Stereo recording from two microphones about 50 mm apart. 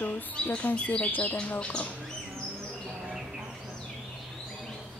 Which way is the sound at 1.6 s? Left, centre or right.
Left.